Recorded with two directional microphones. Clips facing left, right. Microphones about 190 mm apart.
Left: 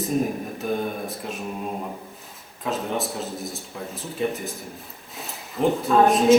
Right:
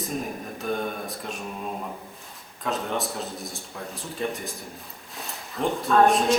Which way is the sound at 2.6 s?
Centre (ahead or behind).